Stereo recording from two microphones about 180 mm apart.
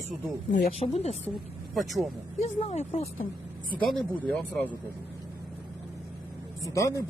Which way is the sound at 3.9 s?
5° left (ahead or behind).